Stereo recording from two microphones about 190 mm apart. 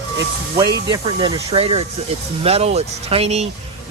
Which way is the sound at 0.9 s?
25° right (ahead or behind).